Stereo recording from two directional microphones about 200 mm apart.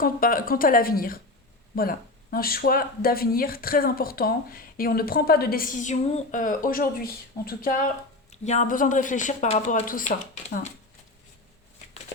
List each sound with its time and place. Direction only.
0.0 s speech: 45° left (ahead or behind)
8.3 s speech: 35° left (ahead or behind)